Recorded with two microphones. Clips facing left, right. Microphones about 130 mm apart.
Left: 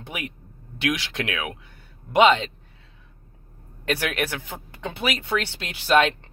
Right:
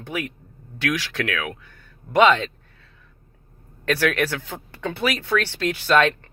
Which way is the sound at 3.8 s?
20° left (ahead or behind).